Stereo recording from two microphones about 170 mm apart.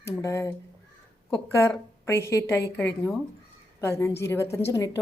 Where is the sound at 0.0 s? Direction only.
15° left (ahead or behind).